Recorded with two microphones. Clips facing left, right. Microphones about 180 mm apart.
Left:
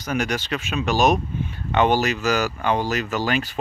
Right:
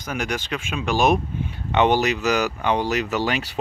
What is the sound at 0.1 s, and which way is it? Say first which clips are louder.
Speech: left 2 dB; 10° right (ahead or behind).